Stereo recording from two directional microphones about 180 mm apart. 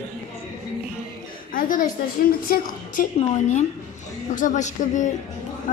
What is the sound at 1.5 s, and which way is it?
A woman's voice, 50° left (ahead or behind).